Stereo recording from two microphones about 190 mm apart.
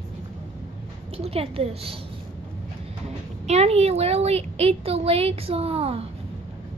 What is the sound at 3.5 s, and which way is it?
A woman's voice, 35° right (ahead or behind).